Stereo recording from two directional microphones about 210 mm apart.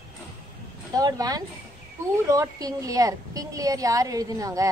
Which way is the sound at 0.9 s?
15° right (ahead or behind).